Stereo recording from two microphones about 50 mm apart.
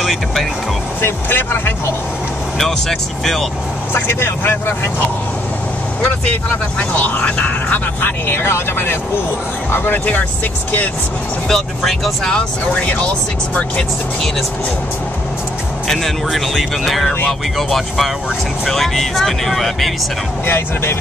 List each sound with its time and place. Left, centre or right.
0.0 s speech: centre
1.0 s speech: left
2.6 s speech: centre
3.9 s speech: left
6.9 s speech: left
11.4 s speech: centre
12.4 s speech: left
15.9 s speech: centre
20.4 s speech: left